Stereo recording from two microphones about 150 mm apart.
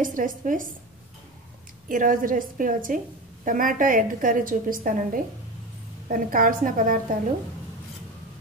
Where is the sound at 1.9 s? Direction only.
65° right (ahead or behind).